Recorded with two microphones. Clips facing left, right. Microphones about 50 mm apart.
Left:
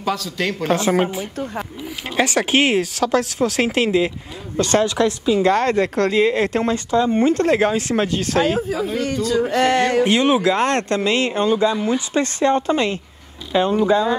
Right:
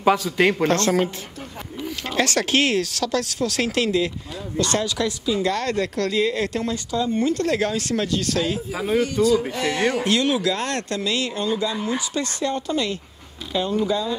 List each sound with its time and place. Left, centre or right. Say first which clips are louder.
0.0 s a woman's voice: right 4 dB; right
0.7 s a woman's voice: left 2 dB; centre
2.1 s speech: left 3 dB; centre
4.6 s a woman's voice: left 6 dB; left
8.7 s a woman's voice: right 1 dB; right
9.0 s speech: right 1 dB; left
10.0 s a woman's voice: left 5 dB; left